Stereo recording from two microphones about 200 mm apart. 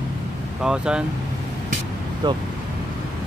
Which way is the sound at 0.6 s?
5° right (ahead or behind).